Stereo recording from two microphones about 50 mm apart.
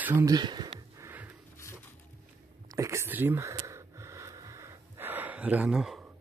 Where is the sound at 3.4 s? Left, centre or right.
Right.